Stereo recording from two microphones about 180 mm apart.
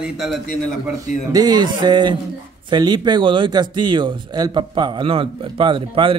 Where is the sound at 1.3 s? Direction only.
20° right (ahead or behind).